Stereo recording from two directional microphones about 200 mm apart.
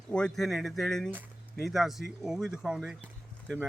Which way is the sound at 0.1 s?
5° left (ahead or behind).